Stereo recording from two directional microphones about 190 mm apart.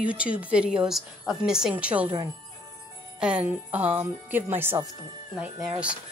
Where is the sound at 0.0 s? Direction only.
5° right (ahead or behind).